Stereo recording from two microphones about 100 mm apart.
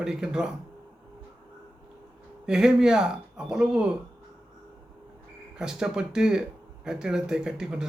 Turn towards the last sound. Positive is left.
turn(degrees=-5)  # may be behind; listen again after turning